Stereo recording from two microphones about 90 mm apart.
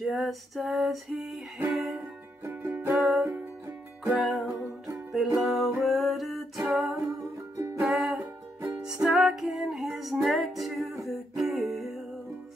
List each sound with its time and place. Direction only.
0.0 s music: centre (ahead or behind)
2.0 s music: 30° right (ahead or behind)
2.9 s music: centre (ahead or behind)
7.5 s music: 35° right (ahead or behind)
7.8 s music: centre (ahead or behind)